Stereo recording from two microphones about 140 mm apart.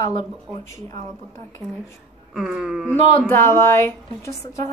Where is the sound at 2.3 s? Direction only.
5° right (ahead or behind).